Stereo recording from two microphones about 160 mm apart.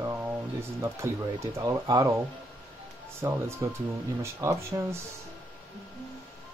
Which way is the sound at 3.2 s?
15° right (ahead or behind).